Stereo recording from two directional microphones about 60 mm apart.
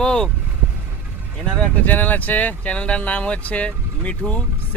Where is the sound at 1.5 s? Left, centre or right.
Left.